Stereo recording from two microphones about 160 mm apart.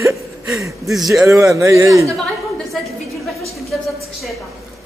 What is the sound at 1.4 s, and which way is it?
Speech, 20° right (ahead or behind).